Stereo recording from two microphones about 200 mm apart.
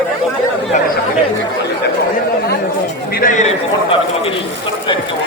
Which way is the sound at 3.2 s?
40° left (ahead or behind).